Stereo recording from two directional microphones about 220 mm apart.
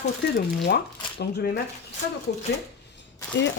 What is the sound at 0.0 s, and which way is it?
Speech, 45° left (ahead or behind).